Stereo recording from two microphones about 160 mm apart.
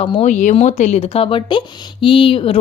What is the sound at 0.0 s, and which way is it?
Speech, 40° left (ahead or behind).